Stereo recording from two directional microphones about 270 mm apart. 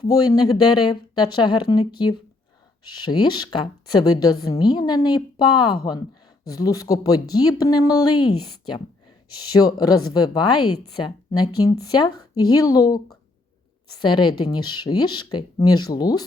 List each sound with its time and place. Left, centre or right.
0.1 s a woman's voice: centre
2.8 s a woman's voice: centre
9.6 s a woman's voice: centre
14.0 s a woman's voice: centre